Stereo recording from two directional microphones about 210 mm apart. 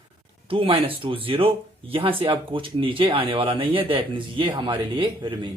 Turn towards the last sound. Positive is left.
turn(degrees=-25)  # may be behind; listen again after turning